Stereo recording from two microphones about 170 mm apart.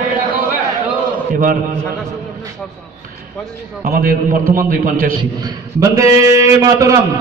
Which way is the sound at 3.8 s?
55° right (ahead or behind).